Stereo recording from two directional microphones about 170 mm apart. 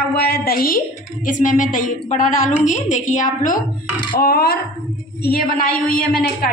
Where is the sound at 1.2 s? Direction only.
50° left (ahead or behind).